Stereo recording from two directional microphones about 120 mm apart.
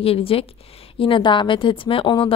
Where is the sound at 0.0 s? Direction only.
55° left (ahead or behind).